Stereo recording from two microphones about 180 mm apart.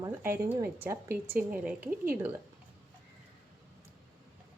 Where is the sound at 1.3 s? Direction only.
50° right (ahead or behind).